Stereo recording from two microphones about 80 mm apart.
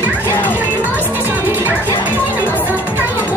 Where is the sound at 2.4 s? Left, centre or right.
Left.